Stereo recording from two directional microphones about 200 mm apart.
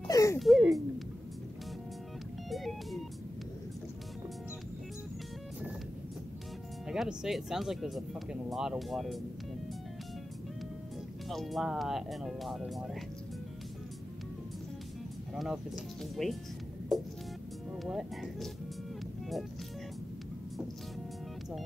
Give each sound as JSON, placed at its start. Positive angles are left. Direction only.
{"t": 0.1, "sound": "a sound", "side_deg": 15}
{"t": 0.4, "sound": "speech", "side_deg": 0}
{"t": 2.5, "sound": "speech", "side_deg": 0}
{"t": 6.9, "sound": "speech", "side_deg": -5}
{"t": 11.2, "sound": "speech", "side_deg": 0}
{"t": 15.3, "sound": "speech", "side_deg": 0}